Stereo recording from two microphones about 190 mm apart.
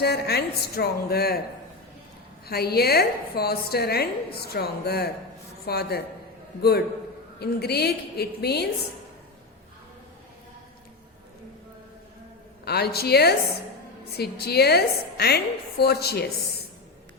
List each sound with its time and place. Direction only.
0.0 s a woman's voice: 55° left (ahead or behind)
2.5 s a woman's voice: 55° left (ahead or behind)
12.6 s a woman's voice: 55° left (ahead or behind)